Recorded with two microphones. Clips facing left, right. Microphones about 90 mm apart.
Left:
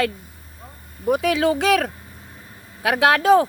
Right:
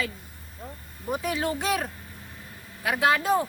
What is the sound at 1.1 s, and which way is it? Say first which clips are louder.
Speech: left 9 dB; 90° left.